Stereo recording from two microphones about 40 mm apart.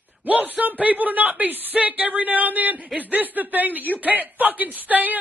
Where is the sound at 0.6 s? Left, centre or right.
Right.